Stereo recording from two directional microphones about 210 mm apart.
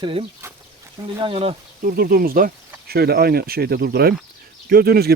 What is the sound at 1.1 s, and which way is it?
Speech, 25° right (ahead or behind).